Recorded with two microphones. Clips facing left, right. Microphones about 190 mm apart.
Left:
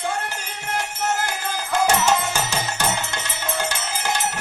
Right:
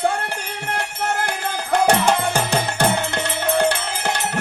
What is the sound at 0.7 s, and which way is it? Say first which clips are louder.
Music: even; 60° right (ahead or behind).